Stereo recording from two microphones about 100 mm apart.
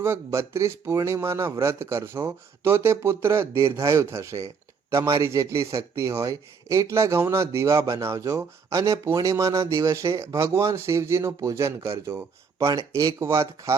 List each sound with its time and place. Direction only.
0.0 s speech: 25° right (ahead or behind)